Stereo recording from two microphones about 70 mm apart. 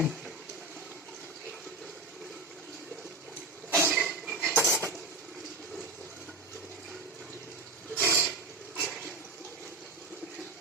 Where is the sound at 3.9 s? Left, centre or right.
Centre.